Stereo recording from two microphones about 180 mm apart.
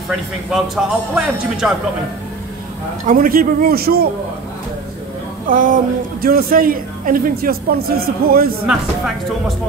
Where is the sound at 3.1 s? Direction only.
50° right (ahead or behind).